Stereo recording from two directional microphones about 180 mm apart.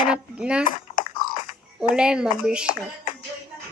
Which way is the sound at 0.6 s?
50° left (ahead or behind).